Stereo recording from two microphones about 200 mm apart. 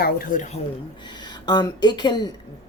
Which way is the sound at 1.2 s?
20° left (ahead or behind).